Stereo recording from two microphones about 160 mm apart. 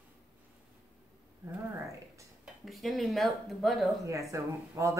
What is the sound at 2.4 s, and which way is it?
Speech, centre (ahead or behind).